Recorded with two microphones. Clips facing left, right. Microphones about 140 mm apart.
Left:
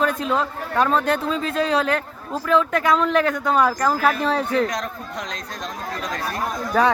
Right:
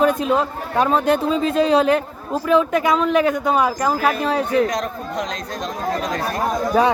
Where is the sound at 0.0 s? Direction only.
15° right (ahead or behind).